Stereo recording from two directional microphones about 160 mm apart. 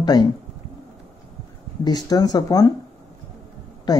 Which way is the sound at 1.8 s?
25° left (ahead or behind).